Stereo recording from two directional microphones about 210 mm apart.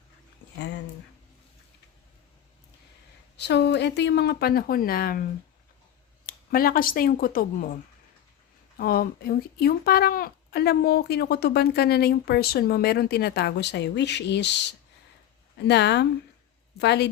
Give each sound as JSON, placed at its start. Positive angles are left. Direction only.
{"t": 3.3, "sound": "speech", "side_deg": 55}
{"t": 6.2, "sound": "speech", "side_deg": 45}
{"t": 8.8, "sound": "speech", "side_deg": 45}